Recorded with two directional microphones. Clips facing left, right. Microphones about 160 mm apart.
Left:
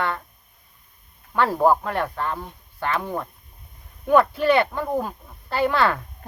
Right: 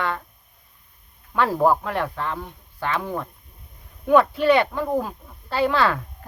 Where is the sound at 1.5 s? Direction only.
Centre (ahead or behind).